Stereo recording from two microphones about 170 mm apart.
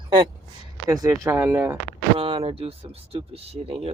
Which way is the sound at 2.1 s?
30° right (ahead or behind).